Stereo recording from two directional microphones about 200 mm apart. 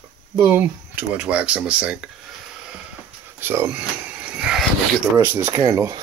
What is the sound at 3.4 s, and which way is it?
Speech, 10° right (ahead or behind).